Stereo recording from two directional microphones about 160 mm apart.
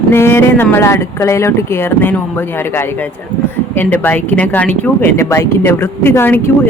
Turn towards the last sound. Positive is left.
turn(degrees=15)  # may be behind; listen again after turning